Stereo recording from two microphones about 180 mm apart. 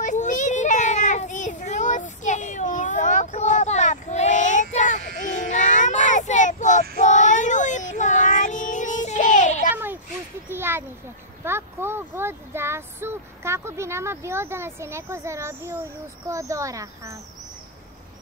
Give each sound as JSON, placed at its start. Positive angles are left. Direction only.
{"t": 0.0, "sound": "child singing", "side_deg": 45}
{"t": 10.5, "sound": "a sound", "side_deg": -10}
{"t": 16.3, "sound": "speech", "side_deg": -15}